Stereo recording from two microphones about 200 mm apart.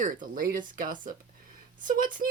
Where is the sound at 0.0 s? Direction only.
45° right (ahead or behind).